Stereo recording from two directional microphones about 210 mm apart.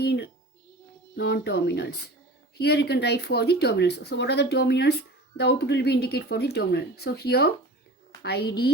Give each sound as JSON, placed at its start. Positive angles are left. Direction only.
{"t": 0.0, "sound": "speech", "side_deg": 50}